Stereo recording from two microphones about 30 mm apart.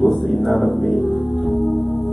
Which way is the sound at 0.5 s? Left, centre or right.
Centre.